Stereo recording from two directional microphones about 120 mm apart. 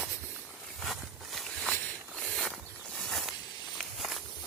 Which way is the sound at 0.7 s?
Centre (ahead or behind).